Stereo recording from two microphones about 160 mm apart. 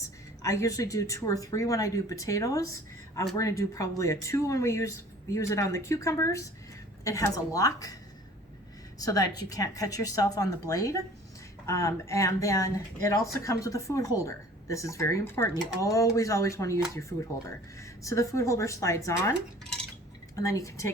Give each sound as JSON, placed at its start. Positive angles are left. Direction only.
{"t": 0.0, "sound": "speech", "side_deg": 20}
{"t": 9.0, "sound": "speech", "side_deg": 20}
{"t": 20.3, "sound": "speech", "side_deg": 20}